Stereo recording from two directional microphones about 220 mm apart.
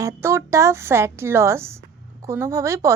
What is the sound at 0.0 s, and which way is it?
A woman's voice, 10° right (ahead or behind).